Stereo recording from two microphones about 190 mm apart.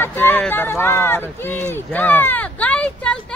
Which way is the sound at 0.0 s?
10° left (ahead or behind).